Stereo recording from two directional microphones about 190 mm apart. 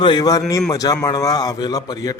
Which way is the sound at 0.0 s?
20° left (ahead or behind).